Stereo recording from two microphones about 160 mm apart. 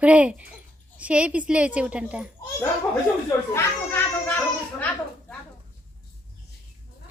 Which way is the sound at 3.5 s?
10° left (ahead or behind).